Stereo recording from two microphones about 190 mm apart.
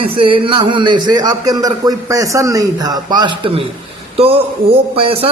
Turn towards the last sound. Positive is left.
turn(degrees=-30)  # may be behind; listen again after turning